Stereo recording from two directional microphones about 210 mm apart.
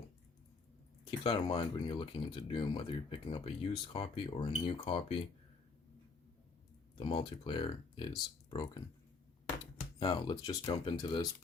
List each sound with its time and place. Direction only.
1.2 s speech: 25° left (ahead or behind)
7.0 s speech: 20° left (ahead or behind)
10.0 s speech: 20° left (ahead or behind)